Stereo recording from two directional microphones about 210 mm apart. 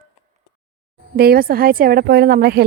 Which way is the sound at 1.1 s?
45° right (ahead or behind).